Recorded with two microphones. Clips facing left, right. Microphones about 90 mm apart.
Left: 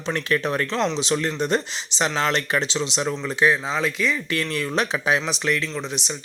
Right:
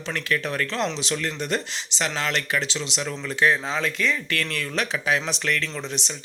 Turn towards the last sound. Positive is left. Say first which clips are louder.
# left 3 dB
turn(degrees=15)  # may be behind; listen again after turning